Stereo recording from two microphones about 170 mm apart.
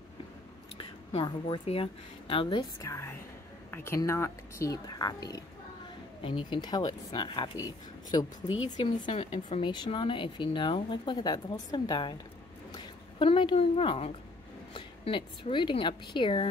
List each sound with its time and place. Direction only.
0.7 s a woman's voice: 30° left (ahead or behind)
2.8 s a woman's voice: 15° left (ahead or behind)